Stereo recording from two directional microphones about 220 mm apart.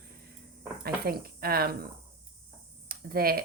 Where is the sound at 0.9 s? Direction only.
45° right (ahead or behind).